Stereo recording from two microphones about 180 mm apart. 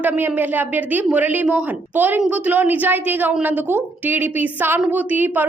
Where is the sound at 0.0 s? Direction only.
10° right (ahead or behind).